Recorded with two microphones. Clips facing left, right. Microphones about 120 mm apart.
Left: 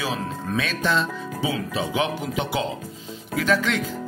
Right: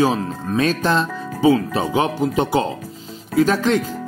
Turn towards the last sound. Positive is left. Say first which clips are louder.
# right 6 dB
turn(degrees=-40)  # may be behind; listen again after turning